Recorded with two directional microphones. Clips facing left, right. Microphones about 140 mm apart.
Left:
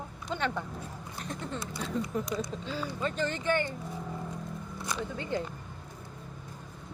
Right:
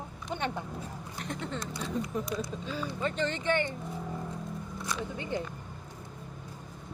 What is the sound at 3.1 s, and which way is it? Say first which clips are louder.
Speech: even; 20° right (ahead or behind).